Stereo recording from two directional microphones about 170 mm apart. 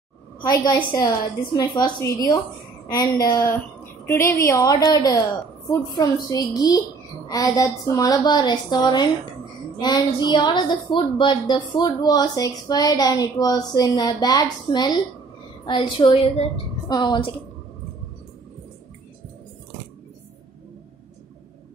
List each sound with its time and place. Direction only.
0.5 s a woman's voice: 25° left (ahead or behind)